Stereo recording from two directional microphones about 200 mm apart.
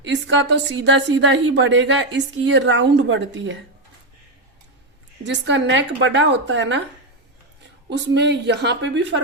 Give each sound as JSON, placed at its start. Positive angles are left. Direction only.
{"t": 0.0, "sound": "a woman's voice", "side_deg": -65}
{"t": 5.2, "sound": "a woman's voice", "side_deg": -65}
{"t": 7.9, "sound": "a woman's voice", "side_deg": -60}